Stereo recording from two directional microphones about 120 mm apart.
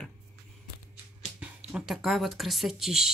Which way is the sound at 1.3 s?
5° right (ahead or behind).